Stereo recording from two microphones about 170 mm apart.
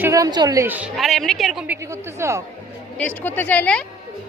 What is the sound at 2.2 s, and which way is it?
Speech, 15° right (ahead or behind).